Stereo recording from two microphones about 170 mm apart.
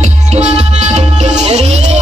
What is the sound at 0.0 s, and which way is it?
Music, 40° right (ahead or behind).